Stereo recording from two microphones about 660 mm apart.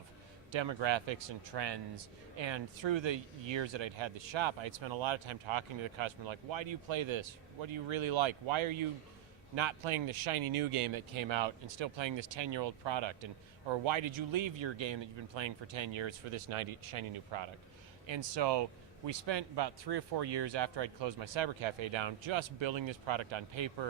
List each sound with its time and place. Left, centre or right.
0.5 s speech: right